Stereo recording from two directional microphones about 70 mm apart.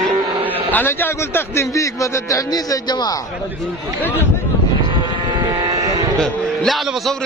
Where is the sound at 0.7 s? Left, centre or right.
Left.